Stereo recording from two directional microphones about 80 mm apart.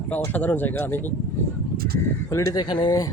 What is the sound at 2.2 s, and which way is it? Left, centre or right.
Speech, left.